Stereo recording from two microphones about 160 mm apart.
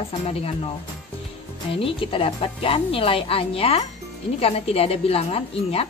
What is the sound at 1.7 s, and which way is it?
A woman's voice, 35° left (ahead or behind).